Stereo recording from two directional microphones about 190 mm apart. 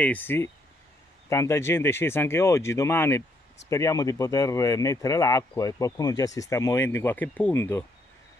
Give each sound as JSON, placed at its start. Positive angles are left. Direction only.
{"t": 0.0, "sound": "speech", "side_deg": 10}